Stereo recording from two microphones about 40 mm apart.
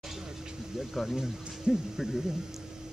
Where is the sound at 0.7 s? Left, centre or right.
Centre.